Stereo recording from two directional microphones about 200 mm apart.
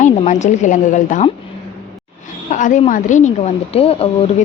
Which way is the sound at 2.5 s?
40° left (ahead or behind).